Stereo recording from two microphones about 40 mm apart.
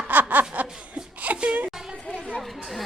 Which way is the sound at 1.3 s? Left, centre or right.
Right.